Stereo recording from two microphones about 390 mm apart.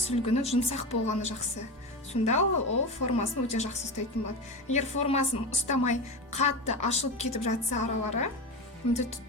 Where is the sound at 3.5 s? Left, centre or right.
Centre.